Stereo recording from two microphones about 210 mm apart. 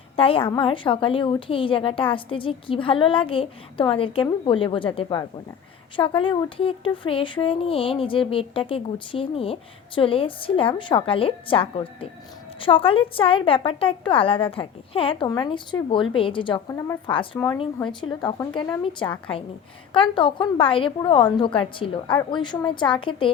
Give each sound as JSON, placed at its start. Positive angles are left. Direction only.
{"t": 0.2, "sound": "speech", "side_deg": 25}